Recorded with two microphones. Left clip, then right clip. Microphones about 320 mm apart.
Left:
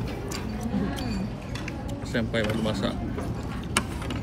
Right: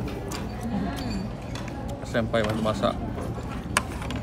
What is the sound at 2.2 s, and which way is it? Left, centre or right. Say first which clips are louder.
Speech: right 2 dB; centre.